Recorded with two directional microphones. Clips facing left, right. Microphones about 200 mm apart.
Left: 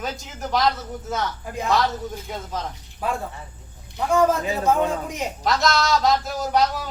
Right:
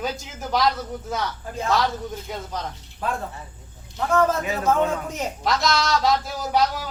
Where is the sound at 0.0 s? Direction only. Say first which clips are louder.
Right 1 dB; centre (ahead or behind).